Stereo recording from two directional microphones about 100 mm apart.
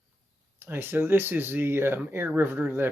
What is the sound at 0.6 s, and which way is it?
Speech, 20° right (ahead or behind).